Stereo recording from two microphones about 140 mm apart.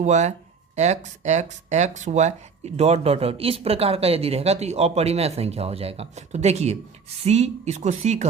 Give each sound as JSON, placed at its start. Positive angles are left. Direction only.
{"t": 0.0, "sound": "speech", "side_deg": -55}